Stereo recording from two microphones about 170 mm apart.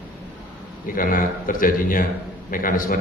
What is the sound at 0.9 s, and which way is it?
A man's voice, 55° left (ahead or behind).